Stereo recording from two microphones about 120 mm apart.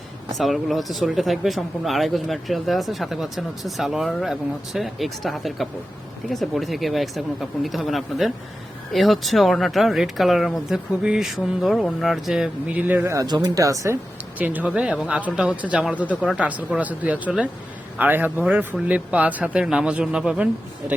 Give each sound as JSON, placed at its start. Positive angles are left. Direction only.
{"t": 0.3, "sound": "speech", "side_deg": 0}
{"t": 13.1, "sound": "speech", "side_deg": -35}
{"t": 14.3, "sound": "speech", "side_deg": -15}